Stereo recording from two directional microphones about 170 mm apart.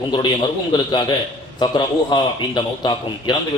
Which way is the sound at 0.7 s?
25° left (ahead or behind).